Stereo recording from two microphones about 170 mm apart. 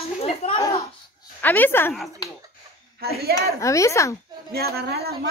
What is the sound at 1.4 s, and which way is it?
Speech, 10° left (ahead or behind).